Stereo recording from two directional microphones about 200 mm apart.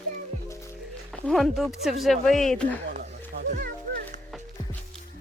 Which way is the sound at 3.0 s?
45° right (ahead or behind).